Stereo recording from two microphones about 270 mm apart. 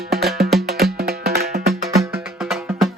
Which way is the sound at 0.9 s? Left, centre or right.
Right.